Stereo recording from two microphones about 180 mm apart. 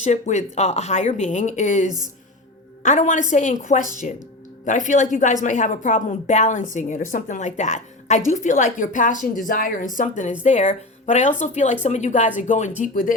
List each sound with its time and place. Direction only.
0.0 s a woman's voice: 40° left (ahead or behind)